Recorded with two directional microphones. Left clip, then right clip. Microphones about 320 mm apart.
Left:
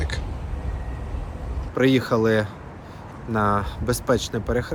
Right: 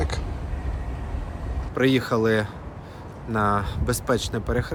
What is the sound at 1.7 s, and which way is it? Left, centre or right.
Speech, centre.